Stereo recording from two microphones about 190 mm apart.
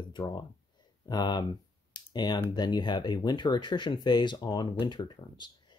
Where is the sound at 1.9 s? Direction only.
20° left (ahead or behind).